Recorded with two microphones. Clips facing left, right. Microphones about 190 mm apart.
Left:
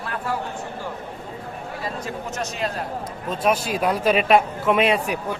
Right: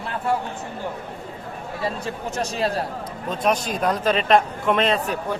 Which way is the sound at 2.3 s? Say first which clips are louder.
Right 4 dB; 35° right (ahead or behind).